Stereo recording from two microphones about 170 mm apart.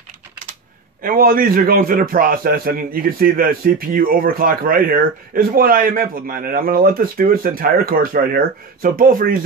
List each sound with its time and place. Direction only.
1.0 s a man's voice: 55° right (ahead or behind)